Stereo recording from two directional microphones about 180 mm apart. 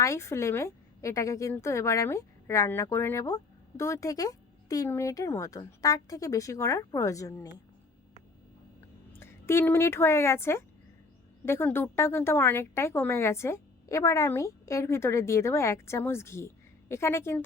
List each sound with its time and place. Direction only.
0.0 s a woman's voice: 15° left (ahead or behind)
9.1 s a woman's voice: 15° left (ahead or behind)